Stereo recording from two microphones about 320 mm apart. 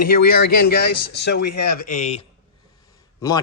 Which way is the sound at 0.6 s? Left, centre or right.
Left.